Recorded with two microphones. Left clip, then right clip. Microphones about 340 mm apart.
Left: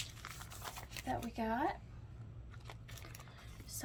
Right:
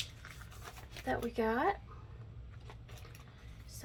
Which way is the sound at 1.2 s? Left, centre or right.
Centre.